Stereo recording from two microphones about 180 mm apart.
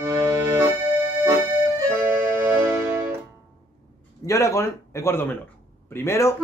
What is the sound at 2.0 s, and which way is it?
Music, 10° right (ahead or behind).